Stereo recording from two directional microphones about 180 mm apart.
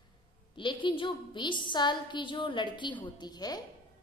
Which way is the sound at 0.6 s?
25° left (ahead or behind).